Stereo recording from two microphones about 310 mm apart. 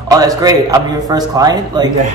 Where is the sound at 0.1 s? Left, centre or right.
Centre.